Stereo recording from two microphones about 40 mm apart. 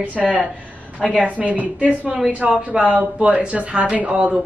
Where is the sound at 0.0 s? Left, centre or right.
Right.